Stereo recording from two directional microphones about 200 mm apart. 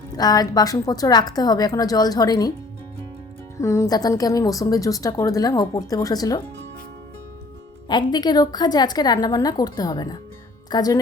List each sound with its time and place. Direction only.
0.2 s a woman's voice: 20° left (ahead or behind)
3.6 s speech: 15° left (ahead or behind)
7.9 s a woman's voice: 20° left (ahead or behind)